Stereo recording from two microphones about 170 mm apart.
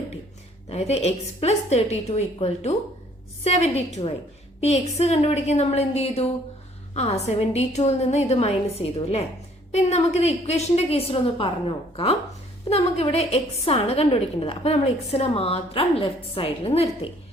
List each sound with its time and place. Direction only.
0.7 s a woman's voice: 40° left (ahead or behind)